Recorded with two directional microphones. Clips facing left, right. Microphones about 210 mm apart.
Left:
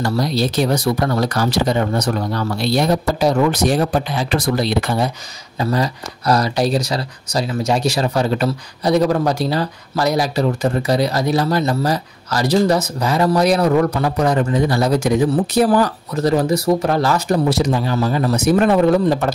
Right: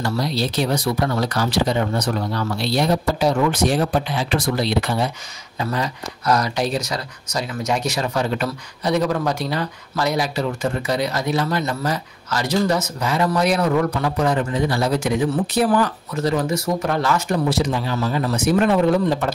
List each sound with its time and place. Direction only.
0.0 s speech: 45° left (ahead or behind)